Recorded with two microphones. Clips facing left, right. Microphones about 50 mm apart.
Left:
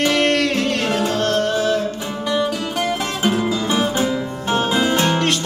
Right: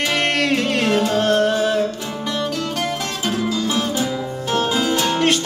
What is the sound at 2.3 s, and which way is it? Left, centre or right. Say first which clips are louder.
Music: left 3 dB; centre.